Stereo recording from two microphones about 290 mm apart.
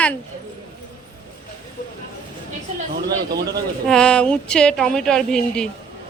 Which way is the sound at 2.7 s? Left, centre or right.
Right.